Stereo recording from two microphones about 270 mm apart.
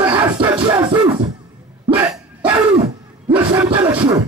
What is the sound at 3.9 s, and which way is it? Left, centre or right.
Speech, centre.